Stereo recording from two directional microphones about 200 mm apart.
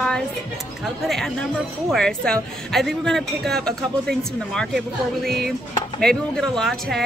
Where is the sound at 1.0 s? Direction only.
Centre (ahead or behind).